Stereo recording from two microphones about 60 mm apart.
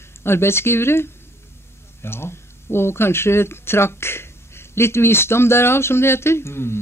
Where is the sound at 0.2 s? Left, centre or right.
Left.